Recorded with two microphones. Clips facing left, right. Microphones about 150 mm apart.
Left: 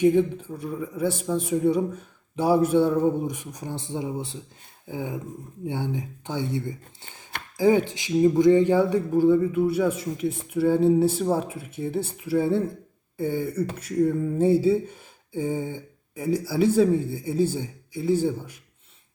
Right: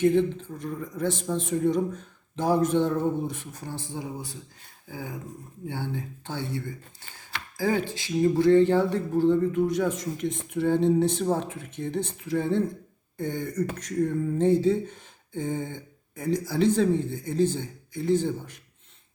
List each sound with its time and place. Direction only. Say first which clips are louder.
0.0 s speech: left 2 dB; 10° left (ahead or behind)